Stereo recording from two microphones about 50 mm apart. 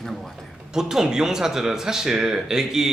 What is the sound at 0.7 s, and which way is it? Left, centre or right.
Speech, centre.